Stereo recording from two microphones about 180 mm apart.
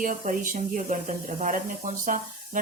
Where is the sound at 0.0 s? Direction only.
45° right (ahead or behind).